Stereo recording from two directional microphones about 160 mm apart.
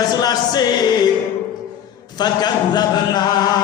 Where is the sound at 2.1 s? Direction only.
25° left (ahead or behind).